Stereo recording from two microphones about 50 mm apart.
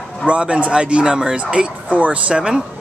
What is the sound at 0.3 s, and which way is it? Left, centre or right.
Speech, right.